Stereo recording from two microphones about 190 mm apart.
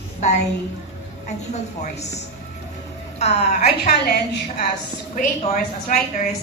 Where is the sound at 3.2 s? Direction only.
35° left (ahead or behind).